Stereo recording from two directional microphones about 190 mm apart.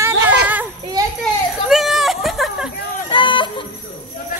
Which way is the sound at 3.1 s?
25° left (ahead or behind).